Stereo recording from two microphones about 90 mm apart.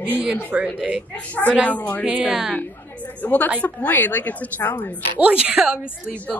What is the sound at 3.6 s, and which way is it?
A woman's voice, 20° left (ahead or behind).